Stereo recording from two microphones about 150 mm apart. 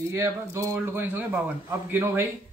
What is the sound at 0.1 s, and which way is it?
A man's voice, 20° right (ahead or behind).